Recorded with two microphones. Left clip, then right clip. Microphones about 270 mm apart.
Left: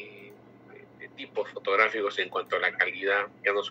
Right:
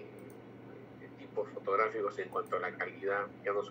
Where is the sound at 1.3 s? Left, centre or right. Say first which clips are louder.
Left 6 dB; left.